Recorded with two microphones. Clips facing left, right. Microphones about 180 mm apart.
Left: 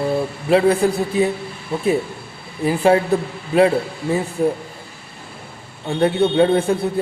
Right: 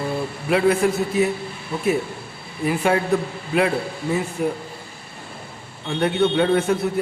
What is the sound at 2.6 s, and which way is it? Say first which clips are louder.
Speech: left 5 dB; 30° left (ahead or behind).